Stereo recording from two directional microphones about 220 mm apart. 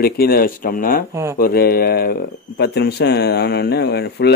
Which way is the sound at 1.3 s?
45° left (ahead or behind).